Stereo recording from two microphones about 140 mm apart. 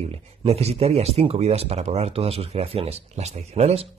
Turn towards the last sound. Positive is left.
turn(degrees=-50)  # may be behind; listen again after turning